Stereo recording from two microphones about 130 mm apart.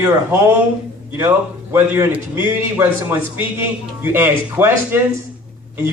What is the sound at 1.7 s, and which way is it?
A man's voice, 15° right (ahead or behind).